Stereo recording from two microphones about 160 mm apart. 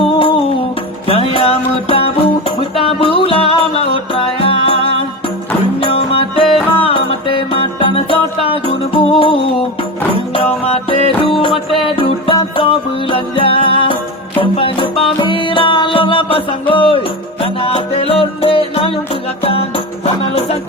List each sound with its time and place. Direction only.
0.2 s music: 35° left (ahead or behind)
5.8 s music: 35° left (ahead or behind)